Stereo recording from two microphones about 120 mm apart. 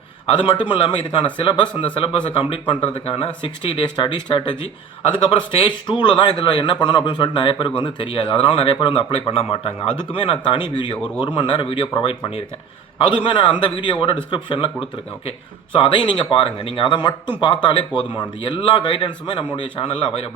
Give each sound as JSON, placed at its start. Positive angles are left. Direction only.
{"t": 0.3, "sound": "a man's voice", "side_deg": 45}